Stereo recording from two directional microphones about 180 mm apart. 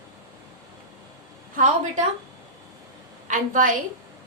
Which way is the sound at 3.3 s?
45° right (ahead or behind).